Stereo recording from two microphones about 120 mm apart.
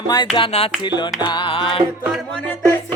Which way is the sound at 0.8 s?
40° left (ahead or behind).